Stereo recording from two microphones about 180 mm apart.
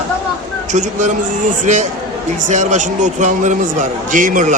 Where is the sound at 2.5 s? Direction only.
40° right (ahead or behind).